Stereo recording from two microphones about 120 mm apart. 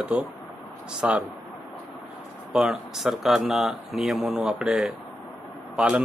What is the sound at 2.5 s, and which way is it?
Speech, 5° right (ahead or behind).